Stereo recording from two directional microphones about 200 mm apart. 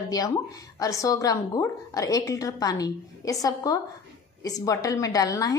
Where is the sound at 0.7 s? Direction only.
15° left (ahead or behind).